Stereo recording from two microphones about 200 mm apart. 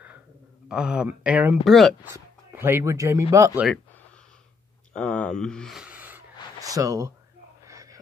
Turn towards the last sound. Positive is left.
turn(degrees=-15)  # may be behind; listen again after turning